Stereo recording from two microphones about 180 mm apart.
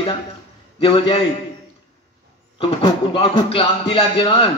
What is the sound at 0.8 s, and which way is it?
Speech, 30° left (ahead or behind).